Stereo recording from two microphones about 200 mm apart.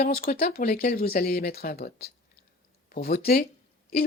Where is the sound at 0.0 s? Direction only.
50° left (ahead or behind).